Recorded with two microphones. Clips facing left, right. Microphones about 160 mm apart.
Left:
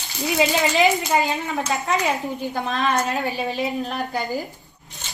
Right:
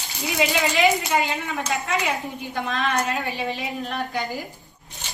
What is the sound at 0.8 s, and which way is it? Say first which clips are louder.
A woman's voice: left 1 dB; 40° left (ahead or behind).